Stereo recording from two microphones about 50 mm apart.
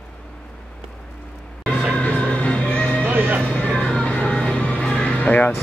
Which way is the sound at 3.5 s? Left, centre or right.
Left.